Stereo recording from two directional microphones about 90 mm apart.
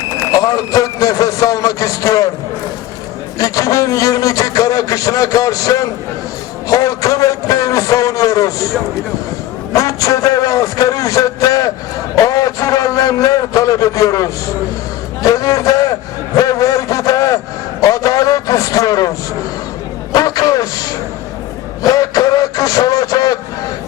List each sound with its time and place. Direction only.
0.3 s a man's voice: 40° left (ahead or behind)
3.3 s a man's voice: 40° left (ahead or behind)
9.7 s a man's voice: 40° left (ahead or behind)
16.4 s a sound: 40° left (ahead or behind)
20.1 s a man's voice: 40° left (ahead or behind)